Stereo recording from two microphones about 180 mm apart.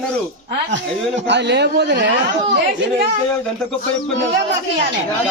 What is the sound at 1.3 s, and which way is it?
Speech, 70° right (ahead or behind).